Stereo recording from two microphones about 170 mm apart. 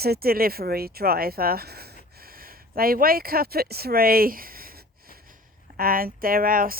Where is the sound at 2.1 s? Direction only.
60° right (ahead or behind).